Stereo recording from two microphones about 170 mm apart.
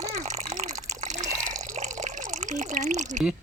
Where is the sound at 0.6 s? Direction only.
45° right (ahead or behind).